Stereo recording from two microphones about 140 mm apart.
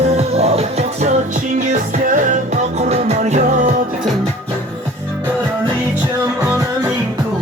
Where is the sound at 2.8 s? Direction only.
50° right (ahead or behind).